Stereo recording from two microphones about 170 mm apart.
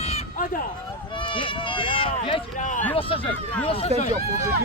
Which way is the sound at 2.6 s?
50° left (ahead or behind).